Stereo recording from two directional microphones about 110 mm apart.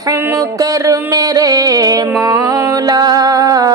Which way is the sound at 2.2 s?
35° right (ahead or behind).